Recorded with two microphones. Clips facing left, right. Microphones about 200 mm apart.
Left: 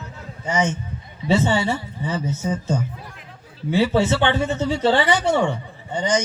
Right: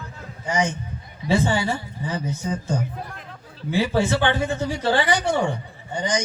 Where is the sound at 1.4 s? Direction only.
25° left (ahead or behind).